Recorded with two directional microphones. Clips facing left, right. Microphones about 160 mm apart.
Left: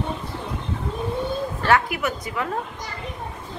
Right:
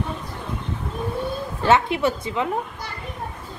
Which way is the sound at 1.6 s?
25° right (ahead or behind).